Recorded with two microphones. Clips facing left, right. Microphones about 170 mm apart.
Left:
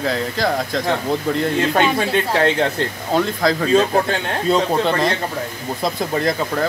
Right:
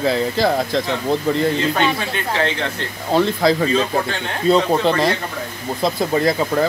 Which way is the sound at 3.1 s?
Centre (ahead or behind).